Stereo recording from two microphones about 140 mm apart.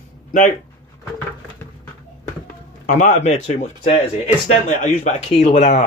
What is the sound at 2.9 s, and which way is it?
Speech, 60° left (ahead or behind).